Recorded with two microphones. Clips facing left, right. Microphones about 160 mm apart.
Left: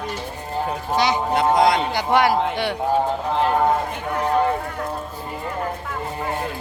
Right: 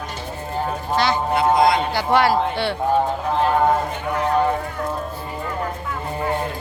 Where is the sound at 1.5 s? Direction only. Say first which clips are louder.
Even; 80° left.